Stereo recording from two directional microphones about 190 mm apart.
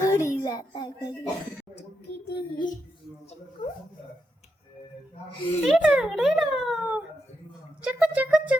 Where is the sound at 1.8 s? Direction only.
60° left (ahead or behind).